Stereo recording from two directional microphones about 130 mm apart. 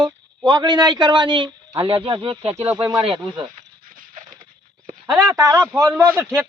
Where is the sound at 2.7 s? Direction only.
40° right (ahead or behind).